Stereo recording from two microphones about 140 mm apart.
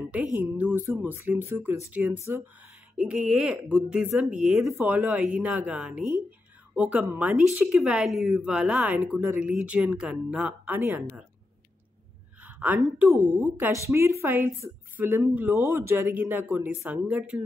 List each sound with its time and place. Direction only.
0.1 s a woman's voice: 10° right (ahead or behind)
3.0 s a woman's voice: 5° right (ahead or behind)
12.4 s a sound: 10° right (ahead or behind)
13.1 s a woman's voice: 15° right (ahead or behind)